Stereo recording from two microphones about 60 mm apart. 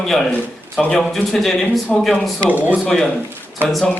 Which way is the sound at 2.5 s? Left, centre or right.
Right.